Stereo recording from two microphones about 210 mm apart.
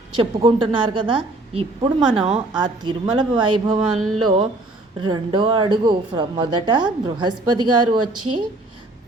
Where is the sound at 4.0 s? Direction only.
90° right.